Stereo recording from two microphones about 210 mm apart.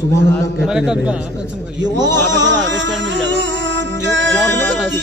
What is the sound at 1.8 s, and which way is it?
Speech, 60° right (ahead or behind).